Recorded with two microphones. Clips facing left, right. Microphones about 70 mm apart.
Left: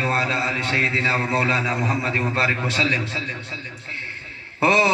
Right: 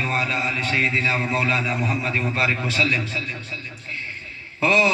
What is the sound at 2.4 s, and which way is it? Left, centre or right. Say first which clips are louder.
Speech: right 1 dB; left.